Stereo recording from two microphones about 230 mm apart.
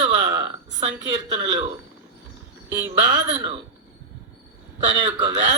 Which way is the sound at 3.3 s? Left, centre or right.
Right.